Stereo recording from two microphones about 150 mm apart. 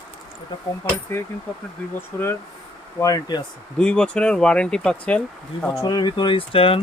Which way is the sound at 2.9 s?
25° left (ahead or behind).